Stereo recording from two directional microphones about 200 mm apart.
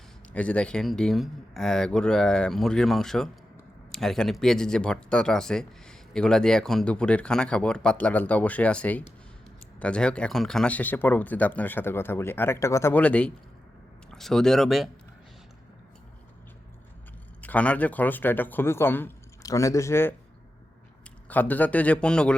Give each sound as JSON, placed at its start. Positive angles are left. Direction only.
{"t": 0.3, "sound": "speech", "side_deg": 5}
{"t": 17.4, "sound": "speech", "side_deg": 5}
{"t": 21.2, "sound": "speech", "side_deg": 10}